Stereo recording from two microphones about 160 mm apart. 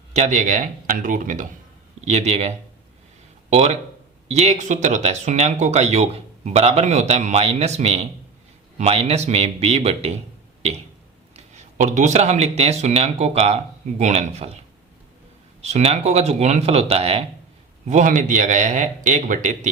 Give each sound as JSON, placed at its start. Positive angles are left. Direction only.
{"t": 0.1, "sound": "speech", "side_deg": -50}
{"t": 2.0, "sound": "speech", "side_deg": -45}
{"t": 11.3, "sound": "speech", "side_deg": -50}
{"t": 15.6, "sound": "speech", "side_deg": -40}
{"t": 17.8, "sound": "speech", "side_deg": -50}